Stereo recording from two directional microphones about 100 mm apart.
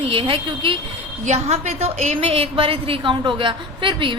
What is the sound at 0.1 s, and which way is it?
Speech, 65° right (ahead or behind).